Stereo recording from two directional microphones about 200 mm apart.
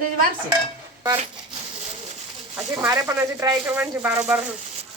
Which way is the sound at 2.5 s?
15° right (ahead or behind).